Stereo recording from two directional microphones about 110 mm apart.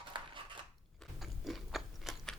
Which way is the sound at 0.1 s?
45° right (ahead or behind).